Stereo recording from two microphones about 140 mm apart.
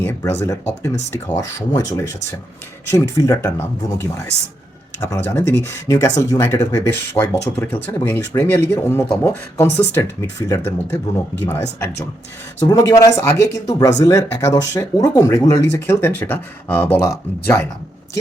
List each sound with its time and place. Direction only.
0.0 s speech: 15° left (ahead or behind)
12.6 s speech: 25° left (ahead or behind)